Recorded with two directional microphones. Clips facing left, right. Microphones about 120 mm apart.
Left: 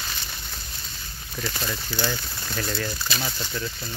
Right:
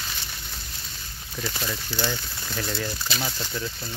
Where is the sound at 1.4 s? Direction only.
5° right (ahead or behind).